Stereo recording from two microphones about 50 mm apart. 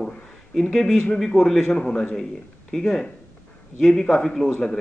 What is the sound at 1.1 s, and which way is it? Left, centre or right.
Speech, centre.